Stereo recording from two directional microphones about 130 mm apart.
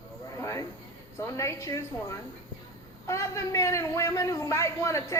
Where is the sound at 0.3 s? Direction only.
25° left (ahead or behind).